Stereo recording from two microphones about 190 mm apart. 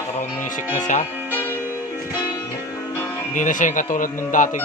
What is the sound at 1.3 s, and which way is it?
Music, 10° left (ahead or behind).